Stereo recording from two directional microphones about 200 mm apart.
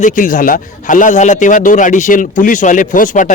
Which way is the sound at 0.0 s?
40° left (ahead or behind).